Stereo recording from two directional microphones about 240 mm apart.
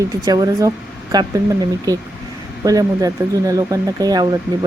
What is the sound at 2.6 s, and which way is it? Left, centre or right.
Speech, centre.